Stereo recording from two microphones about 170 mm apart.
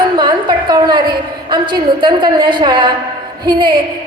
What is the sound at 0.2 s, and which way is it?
A woman's voice, 25° right (ahead or behind).